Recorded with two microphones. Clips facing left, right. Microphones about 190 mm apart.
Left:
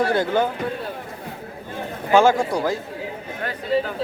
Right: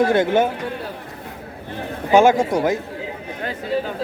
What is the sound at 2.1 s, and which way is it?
Speech, 20° right (ahead or behind).